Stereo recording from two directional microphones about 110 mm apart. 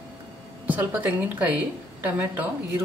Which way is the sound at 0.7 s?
15° right (ahead or behind).